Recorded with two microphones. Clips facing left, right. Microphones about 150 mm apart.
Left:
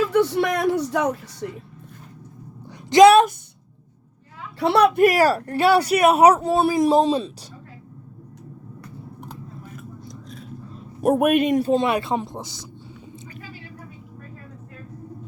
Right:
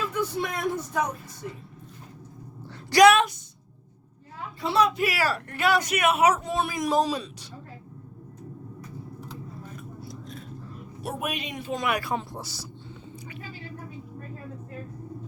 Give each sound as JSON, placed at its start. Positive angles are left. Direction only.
{"t": 0.1, "sound": "speech", "side_deg": 75}
{"t": 2.6, "sound": "a sound", "side_deg": 25}
{"t": 4.6, "sound": "speech", "side_deg": 65}
{"t": 9.7, "sound": "vehicle", "side_deg": 0}
{"t": 11.0, "sound": "a man's voice", "side_deg": 55}
{"t": 11.7, "sound": "speech", "side_deg": 25}